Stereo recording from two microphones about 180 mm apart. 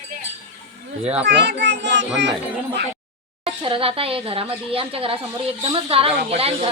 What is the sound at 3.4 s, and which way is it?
Speech, 30° right (ahead or behind).